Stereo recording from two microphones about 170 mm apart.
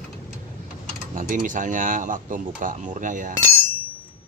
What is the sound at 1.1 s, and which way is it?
Speech, 50° right (ahead or behind).